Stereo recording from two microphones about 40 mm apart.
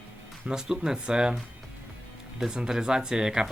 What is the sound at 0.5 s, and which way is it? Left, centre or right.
Speech, centre.